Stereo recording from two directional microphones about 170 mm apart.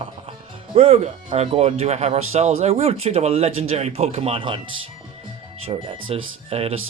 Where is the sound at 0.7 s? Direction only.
35° right (ahead or behind).